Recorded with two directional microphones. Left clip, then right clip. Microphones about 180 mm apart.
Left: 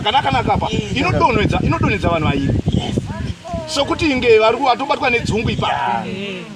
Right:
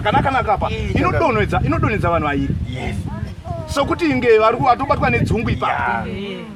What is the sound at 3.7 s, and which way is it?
Speech, 15° right (ahead or behind).